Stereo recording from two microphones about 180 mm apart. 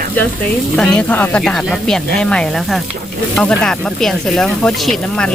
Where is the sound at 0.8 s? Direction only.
5° left (ahead or behind).